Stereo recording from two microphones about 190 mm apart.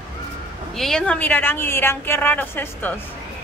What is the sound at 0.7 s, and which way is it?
A woman's voice, 5° left (ahead or behind).